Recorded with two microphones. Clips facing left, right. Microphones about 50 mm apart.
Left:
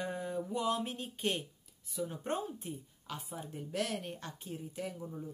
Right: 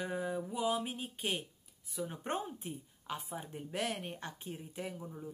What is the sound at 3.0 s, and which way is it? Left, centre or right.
A woman's voice, right.